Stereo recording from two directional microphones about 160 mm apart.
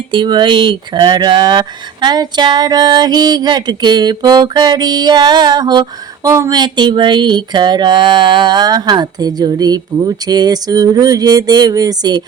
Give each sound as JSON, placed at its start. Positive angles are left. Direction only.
{"t": 0.1, "sound": "speech", "side_deg": -30}